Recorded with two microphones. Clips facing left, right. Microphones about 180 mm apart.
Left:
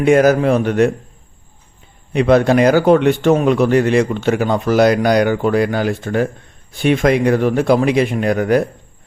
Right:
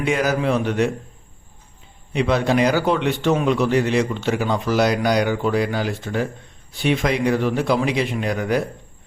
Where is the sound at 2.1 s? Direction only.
50° left (ahead or behind).